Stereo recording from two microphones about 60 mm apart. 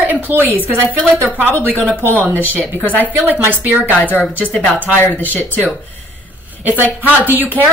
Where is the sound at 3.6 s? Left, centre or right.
Right.